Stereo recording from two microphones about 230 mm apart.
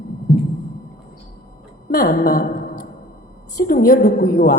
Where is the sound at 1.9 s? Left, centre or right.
Left.